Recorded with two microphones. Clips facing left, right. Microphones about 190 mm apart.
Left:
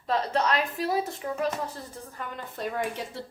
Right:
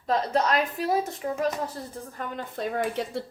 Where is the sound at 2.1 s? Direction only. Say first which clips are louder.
Right 4 dB; 50° right (ahead or behind).